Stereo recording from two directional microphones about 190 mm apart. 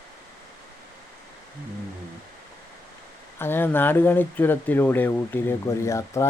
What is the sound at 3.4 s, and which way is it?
Speech, 10° left (ahead or behind).